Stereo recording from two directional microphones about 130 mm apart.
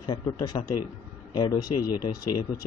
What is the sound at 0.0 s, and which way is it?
Speech, 30° left (ahead or behind).